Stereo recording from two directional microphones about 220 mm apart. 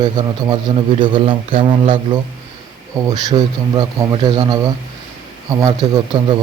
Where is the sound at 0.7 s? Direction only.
20° right (ahead or behind).